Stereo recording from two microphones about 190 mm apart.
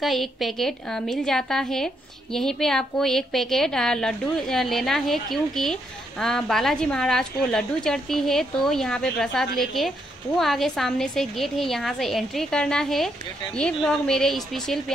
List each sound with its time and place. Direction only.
0.0 s a woman's voice: centre (ahead or behind)